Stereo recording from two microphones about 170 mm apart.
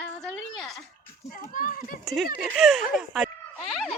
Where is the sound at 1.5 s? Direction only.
55° left (ahead or behind).